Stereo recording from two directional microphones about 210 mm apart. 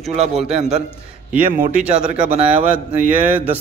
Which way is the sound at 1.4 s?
40° right (ahead or behind).